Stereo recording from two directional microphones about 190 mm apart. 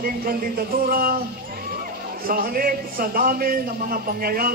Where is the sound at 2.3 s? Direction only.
50° right (ahead or behind).